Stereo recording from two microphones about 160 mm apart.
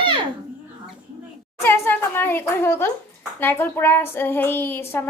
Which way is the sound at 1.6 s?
15° left (ahead or behind).